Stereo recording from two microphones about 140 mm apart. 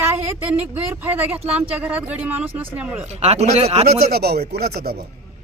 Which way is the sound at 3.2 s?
50° right (ahead or behind).